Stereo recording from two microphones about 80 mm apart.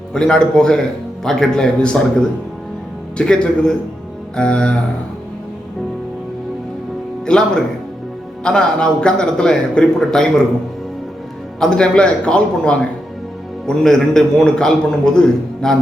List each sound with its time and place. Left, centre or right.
0.1 s a man's voice: centre
3.2 s a man's voice: centre
7.3 s a man's voice: centre
11.6 s a man's voice: centre